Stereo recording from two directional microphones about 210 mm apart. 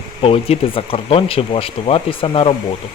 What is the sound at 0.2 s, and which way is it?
Speech, 25° left (ahead or behind).